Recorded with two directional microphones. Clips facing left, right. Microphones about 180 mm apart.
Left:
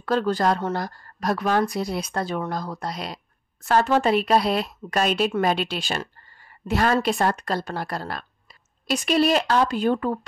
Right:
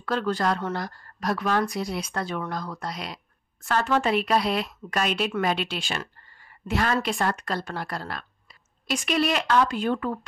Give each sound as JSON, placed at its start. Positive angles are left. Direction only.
{"t": 0.0, "sound": "a woman's voice", "side_deg": 40}